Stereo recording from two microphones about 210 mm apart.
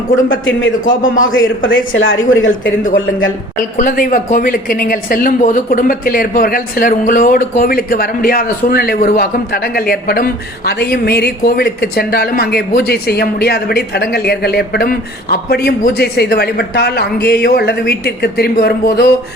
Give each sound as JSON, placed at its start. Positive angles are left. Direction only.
{"t": 0.3, "sound": "a man's voice", "side_deg": 65}
{"t": 0.9, "sound": "a man's voice", "side_deg": 40}
{"t": 1.2, "sound": "speech", "side_deg": 65}
{"t": 3.6, "sound": "speech", "side_deg": 40}